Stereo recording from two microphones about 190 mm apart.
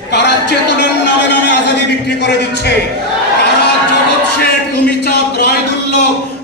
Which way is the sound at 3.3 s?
65° left (ahead or behind).